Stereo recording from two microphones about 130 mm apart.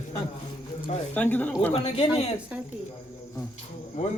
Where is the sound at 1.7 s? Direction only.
55° left (ahead or behind).